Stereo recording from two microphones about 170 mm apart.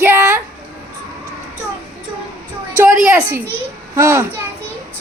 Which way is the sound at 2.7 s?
15° right (ahead or behind).